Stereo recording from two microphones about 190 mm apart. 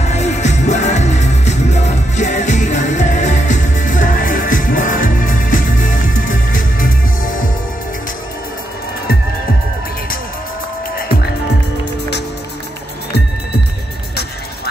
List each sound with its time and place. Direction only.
0.0 s music: 35° left (ahead or behind)